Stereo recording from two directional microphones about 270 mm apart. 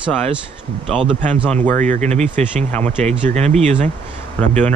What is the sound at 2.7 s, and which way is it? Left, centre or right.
Speech, centre.